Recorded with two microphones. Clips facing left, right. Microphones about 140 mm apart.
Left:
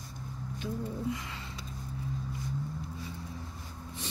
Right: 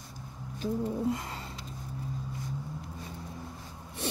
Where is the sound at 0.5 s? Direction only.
40° right (ahead or behind).